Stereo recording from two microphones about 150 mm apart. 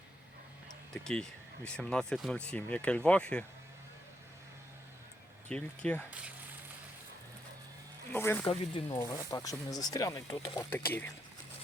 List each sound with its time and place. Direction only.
1.0 s speech: 5° left (ahead or behind)
5.5 s speech: 10° left (ahead or behind)
6.1 s speech: 10° right (ahead or behind)
8.1 s speech: 15° left (ahead or behind)
8.4 s speech: 35° left (ahead or behind)
9.0 s speech: 25° left (ahead or behind)